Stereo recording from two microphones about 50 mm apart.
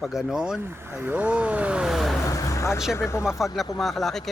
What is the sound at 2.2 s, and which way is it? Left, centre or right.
Vehicle, left.